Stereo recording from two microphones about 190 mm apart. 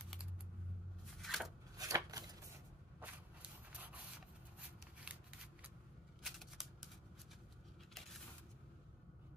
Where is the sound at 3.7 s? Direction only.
10° right (ahead or behind).